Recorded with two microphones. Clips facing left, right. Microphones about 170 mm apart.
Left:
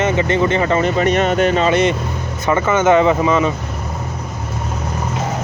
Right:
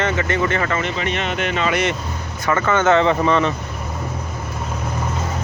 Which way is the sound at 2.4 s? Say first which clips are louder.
Left 3 dB; 15° left (ahead or behind).